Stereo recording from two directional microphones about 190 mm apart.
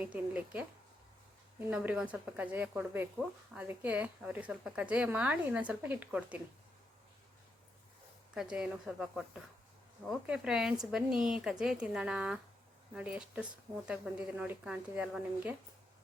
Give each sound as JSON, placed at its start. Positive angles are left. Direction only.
{"t": 0.0, "sound": "speech", "side_deg": -10}
{"t": 1.7, "sound": "speech", "side_deg": -5}
{"t": 8.4, "sound": "a woman's voice", "side_deg": -5}